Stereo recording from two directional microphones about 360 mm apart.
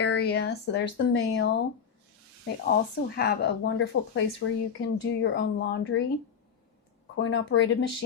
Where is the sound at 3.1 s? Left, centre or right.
Left.